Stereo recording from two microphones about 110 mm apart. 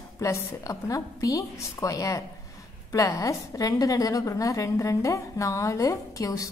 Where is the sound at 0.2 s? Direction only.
30° left (ahead or behind).